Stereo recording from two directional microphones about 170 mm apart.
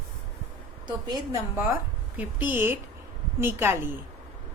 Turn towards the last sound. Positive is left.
turn(degrees=-15)  # may be behind; listen again after turning